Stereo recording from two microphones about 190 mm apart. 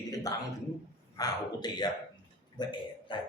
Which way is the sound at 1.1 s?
20° left (ahead or behind).